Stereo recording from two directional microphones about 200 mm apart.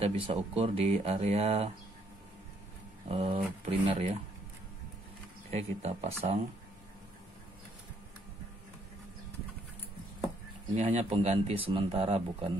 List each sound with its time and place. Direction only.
0.0 s speech: 30° right (ahead or behind)
3.1 s speech: 30° right (ahead or behind)
5.5 s speech: 35° right (ahead or behind)
10.7 s speech: 35° right (ahead or behind)